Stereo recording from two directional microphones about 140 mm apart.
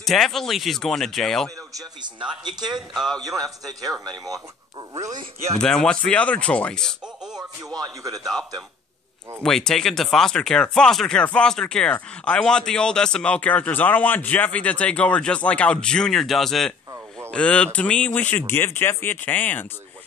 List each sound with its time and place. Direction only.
0.0 s speech: centre (ahead or behind)
1.7 s a man's voice: 25° right (ahead or behind)
2.9 s speech: centre (ahead or behind)
3.2 s a man's voice: 25° right (ahead or behind)
4.9 s a man's voice: 20° right (ahead or behind)
5.6 s speech: 5° left (ahead or behind)
7.3 s a man's voice: 25° right (ahead or behind)
8.2 s speech: 5° left (ahead or behind)